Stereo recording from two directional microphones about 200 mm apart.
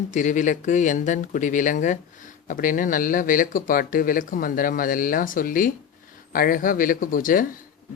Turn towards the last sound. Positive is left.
turn(degrees=45)  # may be behind; listen again after turning